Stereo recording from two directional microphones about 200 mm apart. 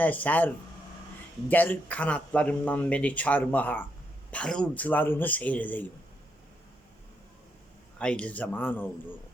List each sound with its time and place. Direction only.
0.0 s speech: 10° left (ahead or behind)
7.9 s speech: 5° left (ahead or behind)